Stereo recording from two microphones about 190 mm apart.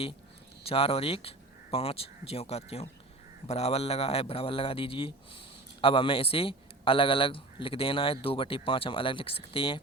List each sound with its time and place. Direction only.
0.6 s a man's voice: 30° left (ahead or behind)